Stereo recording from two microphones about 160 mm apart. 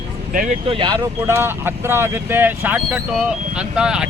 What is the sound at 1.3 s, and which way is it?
Speech, 15° right (ahead or behind).